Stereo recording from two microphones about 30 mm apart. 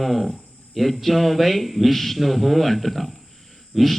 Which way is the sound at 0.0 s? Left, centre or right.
Centre.